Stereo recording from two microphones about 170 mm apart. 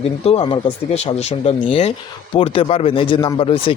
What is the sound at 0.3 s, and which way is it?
A man's voice, 30° left (ahead or behind).